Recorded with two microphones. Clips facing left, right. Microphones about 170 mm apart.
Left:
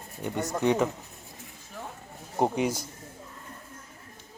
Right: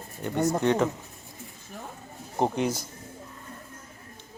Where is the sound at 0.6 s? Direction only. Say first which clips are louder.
Left 2 dB; 10° left (ahead or behind).